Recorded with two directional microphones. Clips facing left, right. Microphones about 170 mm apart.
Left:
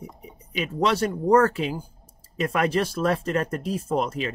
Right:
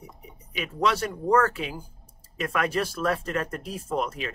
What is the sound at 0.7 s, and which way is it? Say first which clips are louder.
Speech: left 3 dB; 30° left (ahead or behind).